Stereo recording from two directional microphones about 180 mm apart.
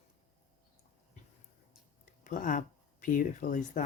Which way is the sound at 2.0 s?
45° left (ahead or behind).